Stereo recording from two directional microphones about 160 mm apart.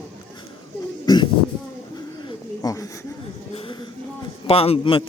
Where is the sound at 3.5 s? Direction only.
30° left (ahead or behind).